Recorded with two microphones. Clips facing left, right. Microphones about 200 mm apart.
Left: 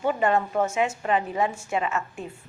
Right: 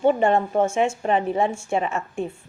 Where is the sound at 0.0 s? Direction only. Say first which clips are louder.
Right 5 dB; 25° right (ahead or behind).